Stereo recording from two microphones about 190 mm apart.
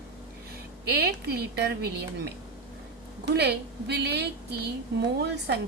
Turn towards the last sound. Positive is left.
turn(degrees=-60)  # may be behind; listen again after turning